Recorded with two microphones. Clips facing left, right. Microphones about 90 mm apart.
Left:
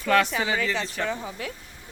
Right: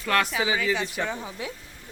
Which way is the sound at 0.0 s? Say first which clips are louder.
Left 2 dB; centre (ahead or behind).